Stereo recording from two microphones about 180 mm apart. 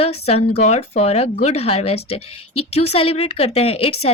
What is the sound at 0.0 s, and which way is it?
A woman's voice, 35° left (ahead or behind).